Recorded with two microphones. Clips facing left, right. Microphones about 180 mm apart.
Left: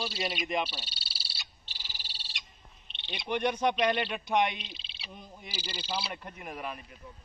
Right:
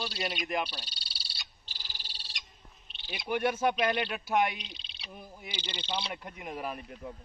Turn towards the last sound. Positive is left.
turn(degrees=-60)  # may be behind; listen again after turning